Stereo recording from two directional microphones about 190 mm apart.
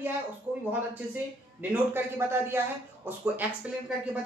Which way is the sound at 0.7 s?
10° right (ahead or behind).